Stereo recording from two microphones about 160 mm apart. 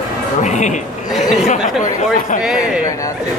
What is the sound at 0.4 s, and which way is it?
Music, 50° left (ahead or behind).